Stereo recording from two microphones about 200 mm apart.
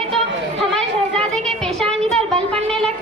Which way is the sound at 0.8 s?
5° left (ahead or behind).